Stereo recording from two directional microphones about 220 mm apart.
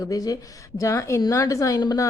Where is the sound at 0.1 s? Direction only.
15° left (ahead or behind).